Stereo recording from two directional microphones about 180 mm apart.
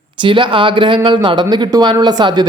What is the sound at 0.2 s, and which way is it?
Speech, 25° right (ahead or behind).